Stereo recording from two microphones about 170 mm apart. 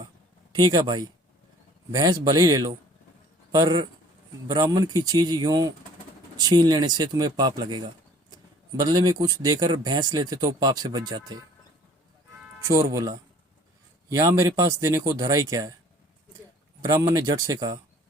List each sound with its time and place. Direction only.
0.5 s a man's voice: 25° right (ahead or behind)
12.6 s a man's voice: 20° right (ahead or behind)
16.8 s a man's voice: 20° right (ahead or behind)